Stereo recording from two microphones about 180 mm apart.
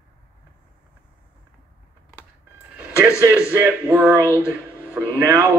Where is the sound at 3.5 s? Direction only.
10° right (ahead or behind).